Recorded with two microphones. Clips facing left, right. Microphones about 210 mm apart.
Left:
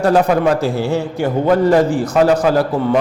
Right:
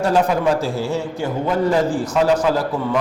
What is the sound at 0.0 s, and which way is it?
A man's voice, 65° left (ahead or behind).